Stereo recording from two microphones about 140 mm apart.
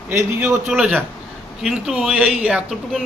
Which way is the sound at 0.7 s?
5° right (ahead or behind).